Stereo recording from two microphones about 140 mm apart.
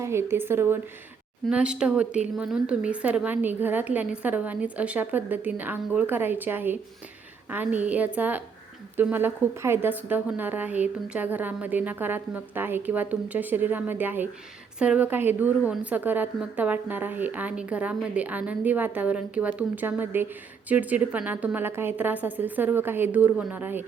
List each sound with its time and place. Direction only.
0.0 s a woman's voice: 20° right (ahead or behind)